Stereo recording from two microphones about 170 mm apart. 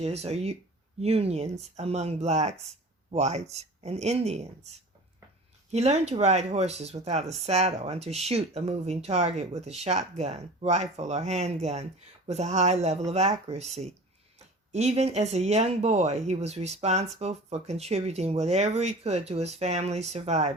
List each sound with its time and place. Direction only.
0.0 s speech: 40° right (ahead or behind)
5.7 s speech: 40° right (ahead or behind)